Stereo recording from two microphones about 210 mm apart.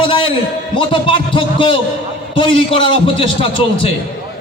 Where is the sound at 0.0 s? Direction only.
25° left (ahead or behind).